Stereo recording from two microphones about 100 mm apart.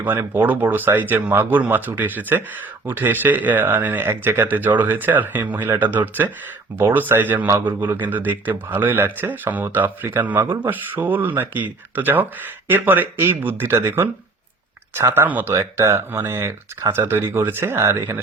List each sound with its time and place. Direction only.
0.0 s a man's voice: 20° right (ahead or behind)